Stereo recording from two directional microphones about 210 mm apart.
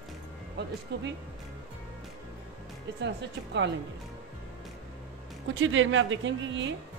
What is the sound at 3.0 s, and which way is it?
Speech, 55° right (ahead or behind).